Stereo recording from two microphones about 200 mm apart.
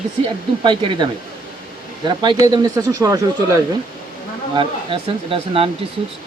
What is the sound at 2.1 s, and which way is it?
Speech, 20° right (ahead or behind).